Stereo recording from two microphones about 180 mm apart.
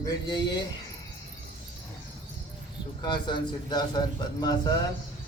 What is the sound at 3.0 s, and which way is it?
A man's voice, 25° left (ahead or behind).